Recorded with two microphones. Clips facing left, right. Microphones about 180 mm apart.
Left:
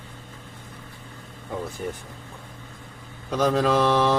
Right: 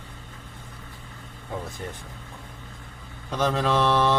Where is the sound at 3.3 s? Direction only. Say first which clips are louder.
Left 3 dB; 10° left (ahead or behind).